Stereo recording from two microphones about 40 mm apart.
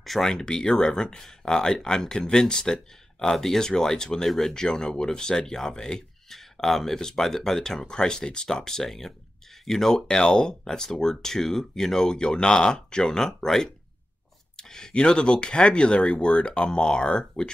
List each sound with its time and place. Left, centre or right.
0.0 s speech: centre
0.3 s speech: centre
4.3 s speech: centre
4.6 s speech: centre